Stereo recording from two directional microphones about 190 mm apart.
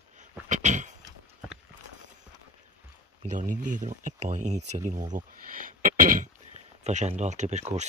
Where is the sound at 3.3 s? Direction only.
40° right (ahead or behind).